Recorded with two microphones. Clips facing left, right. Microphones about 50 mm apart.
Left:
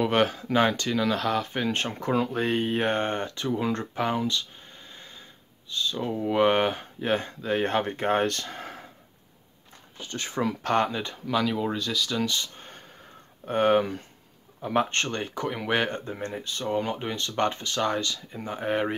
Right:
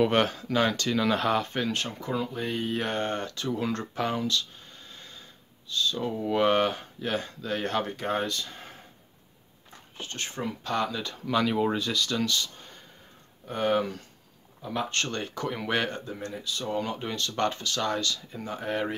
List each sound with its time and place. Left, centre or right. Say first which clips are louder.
0.0 s speech: even; centre
0.8 s speech: even; centre
1.7 s speech: left 3 dB; left
2.0 s speech: left 5 dB; left; by 4.5 s centre
5.7 s speech: even; left
8.3 s speech: left 3 dB; left
10.4 s speech: left 7 dB; left
10.9 s speech: left 2 dB; left
11.2 s speech: right 1 dB; centre
13.5 s speech: left 4 dB; left
14.6 s speech: left 6 dB; left
14.9 s speech: left 2 dB; left
15.9 s speech: left 3 dB; left
16.7 s speech: left 3 dB; left